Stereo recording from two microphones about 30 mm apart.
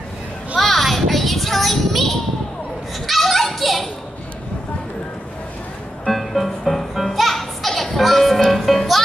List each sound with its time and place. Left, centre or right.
0.6 s child singing: centre
3.1 s children playing: centre
6.0 s music: centre